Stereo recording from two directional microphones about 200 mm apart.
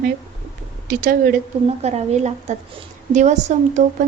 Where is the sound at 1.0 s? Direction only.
45° right (ahead or behind).